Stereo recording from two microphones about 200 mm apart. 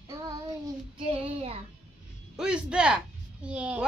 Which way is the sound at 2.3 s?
5° right (ahead or behind).